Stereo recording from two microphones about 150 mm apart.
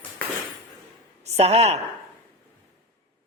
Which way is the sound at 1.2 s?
45° right (ahead or behind).